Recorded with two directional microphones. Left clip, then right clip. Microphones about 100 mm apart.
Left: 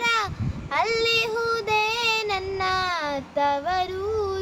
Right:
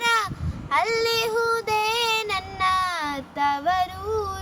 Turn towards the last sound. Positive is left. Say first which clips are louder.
# left 1 dB
turn(degrees=40)  # may be behind; listen again after turning